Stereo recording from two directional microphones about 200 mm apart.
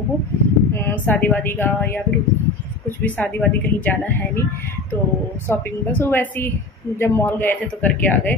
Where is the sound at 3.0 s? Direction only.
10° left (ahead or behind).